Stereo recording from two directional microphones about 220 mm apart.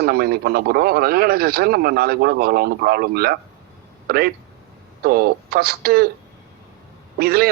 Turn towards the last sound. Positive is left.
turn(degrees=-45)  # may be behind; listen again after turning